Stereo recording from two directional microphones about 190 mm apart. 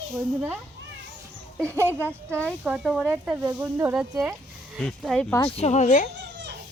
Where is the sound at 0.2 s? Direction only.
10° right (ahead or behind).